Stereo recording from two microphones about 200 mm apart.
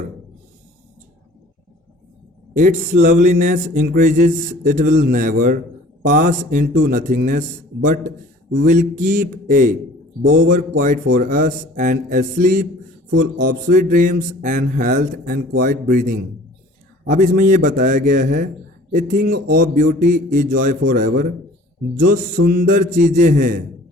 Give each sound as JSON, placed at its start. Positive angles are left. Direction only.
{"t": 2.6, "sound": "a man's voice", "side_deg": -40}
{"t": 13.7, "sound": "a man's voice", "side_deg": -40}